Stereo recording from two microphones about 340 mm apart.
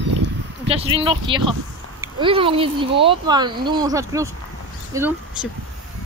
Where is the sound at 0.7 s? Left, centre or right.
Centre.